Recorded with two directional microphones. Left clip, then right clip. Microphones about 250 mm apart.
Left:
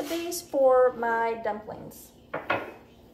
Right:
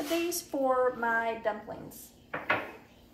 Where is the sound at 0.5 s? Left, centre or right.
Centre.